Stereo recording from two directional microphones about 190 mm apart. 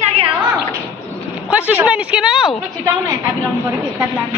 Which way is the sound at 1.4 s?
10° right (ahead or behind).